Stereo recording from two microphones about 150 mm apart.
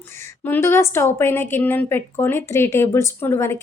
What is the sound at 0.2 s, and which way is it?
Speech, 15° left (ahead or behind).